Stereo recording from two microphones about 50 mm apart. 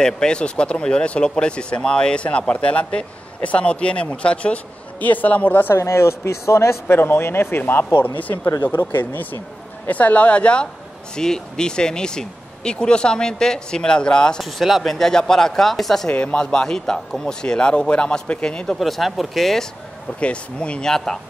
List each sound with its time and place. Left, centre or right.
0.0 s speech: centre
5.0 s a man's voice: left
5.8 s speech: left
7.0 s speech: left
8.0 s a man's voice: left
8.7 s speech: left
9.8 s speech: left
11.1 s speech: centre
14.4 s speech: centre
16.1 s speech: left
18.8 s speech: centre
20.2 s speech: left
20.9 s speech: centre